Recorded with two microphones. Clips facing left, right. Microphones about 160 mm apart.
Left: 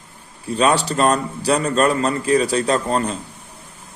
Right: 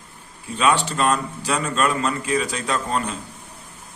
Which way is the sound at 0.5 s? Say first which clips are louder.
Left 3 dB; 40° left (ahead or behind).